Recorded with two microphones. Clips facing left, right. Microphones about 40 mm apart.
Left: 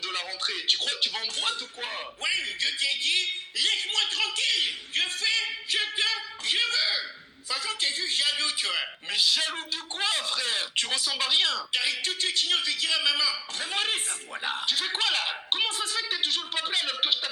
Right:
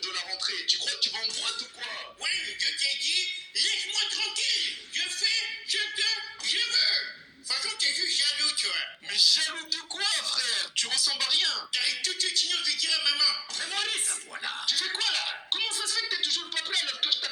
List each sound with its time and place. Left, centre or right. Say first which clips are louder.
0.0 s speech: left 2 dB; left